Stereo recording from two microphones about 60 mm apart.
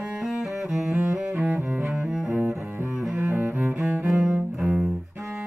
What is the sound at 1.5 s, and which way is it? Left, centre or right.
Cello, centre.